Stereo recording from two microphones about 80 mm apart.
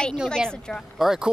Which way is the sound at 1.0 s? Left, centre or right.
Centre.